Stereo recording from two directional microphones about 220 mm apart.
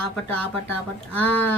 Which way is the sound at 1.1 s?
5° left (ahead or behind).